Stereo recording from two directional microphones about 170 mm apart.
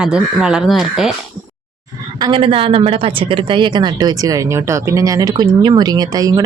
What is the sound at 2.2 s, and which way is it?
Speech, 30° right (ahead or behind).